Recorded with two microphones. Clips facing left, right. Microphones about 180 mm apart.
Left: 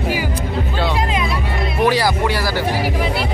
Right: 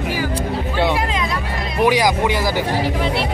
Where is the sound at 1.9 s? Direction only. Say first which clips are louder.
Right 2 dB; 15° right (ahead or behind).